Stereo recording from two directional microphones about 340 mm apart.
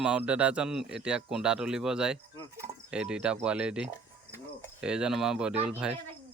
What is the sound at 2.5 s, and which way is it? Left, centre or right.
Cricket, centre.